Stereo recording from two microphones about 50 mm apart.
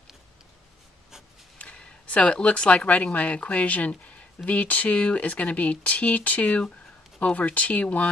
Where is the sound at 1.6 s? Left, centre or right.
Left.